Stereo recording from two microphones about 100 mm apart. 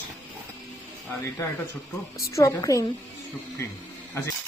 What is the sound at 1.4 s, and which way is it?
Speech, 35° left (ahead or behind).